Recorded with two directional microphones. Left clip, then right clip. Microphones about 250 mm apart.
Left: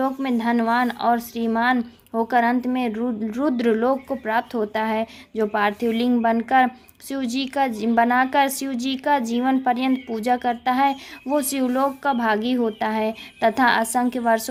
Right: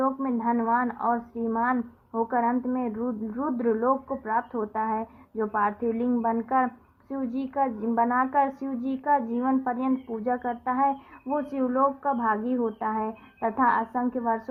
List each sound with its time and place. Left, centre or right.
0.0 s a woman's voice: left